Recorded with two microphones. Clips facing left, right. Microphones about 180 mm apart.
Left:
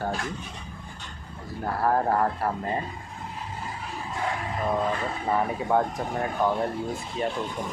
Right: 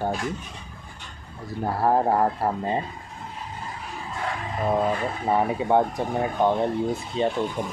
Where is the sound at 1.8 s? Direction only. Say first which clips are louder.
Right 3 dB; 20° right (ahead or behind).